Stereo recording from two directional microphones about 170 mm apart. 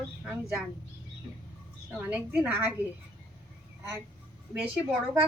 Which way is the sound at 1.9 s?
10° right (ahead or behind).